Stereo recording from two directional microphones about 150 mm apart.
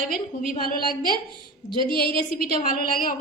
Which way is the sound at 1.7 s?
30° right (ahead or behind).